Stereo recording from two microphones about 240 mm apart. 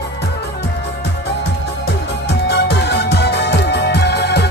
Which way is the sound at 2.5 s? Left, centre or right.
Left.